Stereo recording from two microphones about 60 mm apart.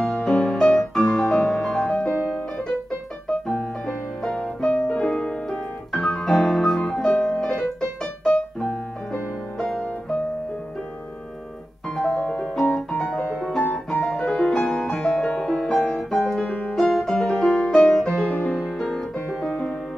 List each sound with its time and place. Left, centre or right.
0.0 s music: centre
4.2 s music: centre
5.9 s piano: centre
9.8 s music: centre
11.9 s music: centre
12.7 s piano: centre
14.0 s music: centre
16.4 s piano: left
16.7 s music: centre
17.5 s music: centre
17.7 s music: centre
18.3 s music: left
18.8 s music: centre